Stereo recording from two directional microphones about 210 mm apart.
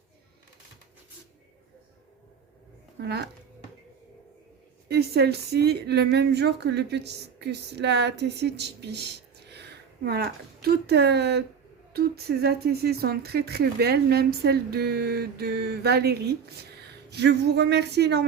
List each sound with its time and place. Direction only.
3.0 s speech: 50° right (ahead or behind)
4.9 s speech: 50° right (ahead or behind)